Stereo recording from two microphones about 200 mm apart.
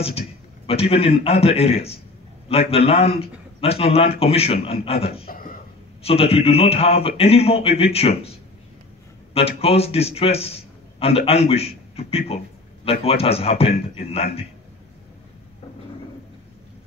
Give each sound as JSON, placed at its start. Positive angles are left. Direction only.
{"t": 0.7, "sound": "a man's voice", "side_deg": 30}
{"t": 5.3, "sound": "a sound", "side_deg": 45}
{"t": 6.0, "sound": "a man's voice", "side_deg": 30}